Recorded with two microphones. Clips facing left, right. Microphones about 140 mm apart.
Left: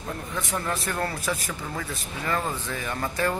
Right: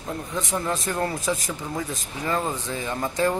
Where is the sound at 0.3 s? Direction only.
15° right (ahead or behind).